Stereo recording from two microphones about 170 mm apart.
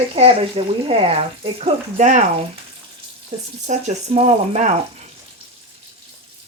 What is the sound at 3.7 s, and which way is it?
Speech, 45° right (ahead or behind).